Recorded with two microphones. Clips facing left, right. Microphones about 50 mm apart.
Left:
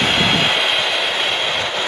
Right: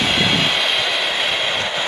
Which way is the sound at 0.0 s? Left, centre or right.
Centre.